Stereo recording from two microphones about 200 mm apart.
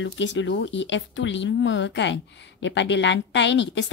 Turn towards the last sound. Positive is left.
turn(degrees=65)  # may be behind; listen again after turning